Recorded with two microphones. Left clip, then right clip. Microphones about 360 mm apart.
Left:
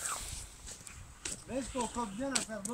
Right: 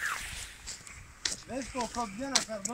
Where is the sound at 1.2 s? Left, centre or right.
Centre.